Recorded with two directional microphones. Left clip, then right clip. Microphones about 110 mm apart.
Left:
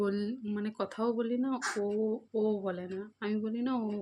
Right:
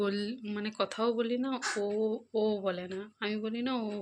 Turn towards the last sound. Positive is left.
turn(degrees=40)  # may be behind; listen again after turning